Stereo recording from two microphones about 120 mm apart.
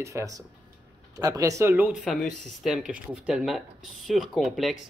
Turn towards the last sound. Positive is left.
turn(degrees=0)  # may be behind; listen again after turning